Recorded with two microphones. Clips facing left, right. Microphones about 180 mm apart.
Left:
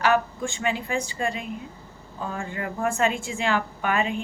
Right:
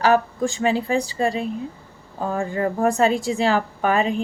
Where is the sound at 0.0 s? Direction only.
35° right (ahead or behind).